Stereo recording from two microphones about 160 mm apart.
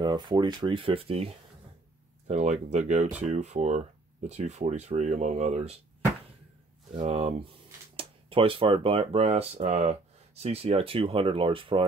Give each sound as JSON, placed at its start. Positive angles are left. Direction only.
{"t": 0.0, "sound": "speech", "side_deg": -25}
{"t": 6.9, "sound": "speech", "side_deg": -40}